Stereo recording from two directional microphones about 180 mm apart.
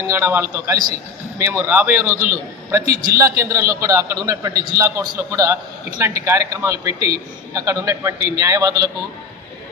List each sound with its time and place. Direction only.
0.0 s a man's voice: 15° right (ahead or behind)